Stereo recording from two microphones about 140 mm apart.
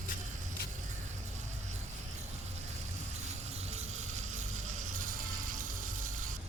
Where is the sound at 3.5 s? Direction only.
50° right (ahead or behind); by 6.3 s 65° right (ahead or behind).